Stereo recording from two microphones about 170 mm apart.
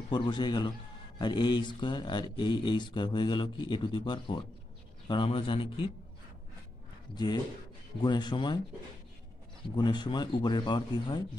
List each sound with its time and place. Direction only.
0.1 s a man's voice: 25° left (ahead or behind)
8.0 s a man's voice: 25° left (ahead or behind)
9.8 s a man's voice: 25° left (ahead or behind)